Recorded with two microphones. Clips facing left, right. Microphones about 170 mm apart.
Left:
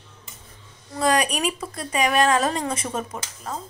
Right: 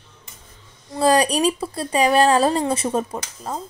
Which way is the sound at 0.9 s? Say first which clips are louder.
Right 5 dB; 30° right (ahead or behind).